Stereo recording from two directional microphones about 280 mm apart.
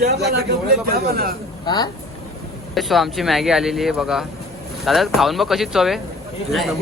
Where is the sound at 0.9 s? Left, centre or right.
Right.